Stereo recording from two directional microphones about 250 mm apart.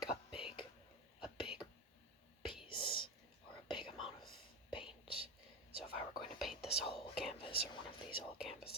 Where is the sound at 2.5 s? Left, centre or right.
Centre.